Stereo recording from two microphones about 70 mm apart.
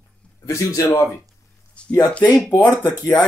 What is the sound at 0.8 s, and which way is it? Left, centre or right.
Speech, left.